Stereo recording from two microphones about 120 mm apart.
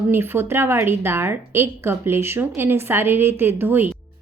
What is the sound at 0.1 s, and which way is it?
Speech, 20° right (ahead or behind).